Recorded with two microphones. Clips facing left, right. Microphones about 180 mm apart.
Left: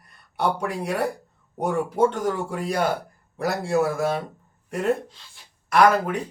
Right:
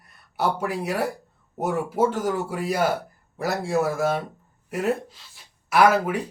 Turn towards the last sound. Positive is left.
turn(degrees=-5)  # may be behind; listen again after turning